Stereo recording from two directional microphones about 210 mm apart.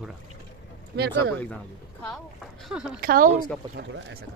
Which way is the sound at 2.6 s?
5° right (ahead or behind).